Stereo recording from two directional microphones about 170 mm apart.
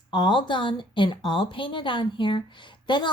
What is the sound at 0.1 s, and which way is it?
A woman's voice, 30° left (ahead or behind).